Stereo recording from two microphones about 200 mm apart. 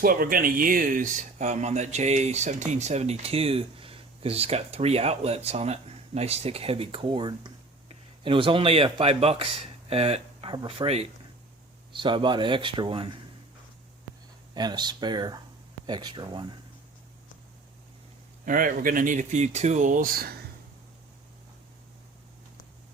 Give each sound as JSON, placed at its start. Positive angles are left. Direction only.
{"t": 0.0, "sound": "speech", "side_deg": -45}
{"t": 14.5, "sound": "speech", "side_deg": -20}
{"t": 18.4, "sound": "speech", "side_deg": -45}